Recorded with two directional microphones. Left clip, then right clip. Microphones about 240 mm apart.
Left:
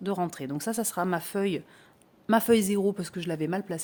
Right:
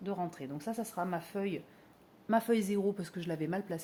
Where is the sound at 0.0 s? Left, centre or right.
Left.